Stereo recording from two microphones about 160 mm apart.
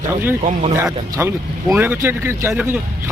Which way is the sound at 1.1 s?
15° right (ahead or behind).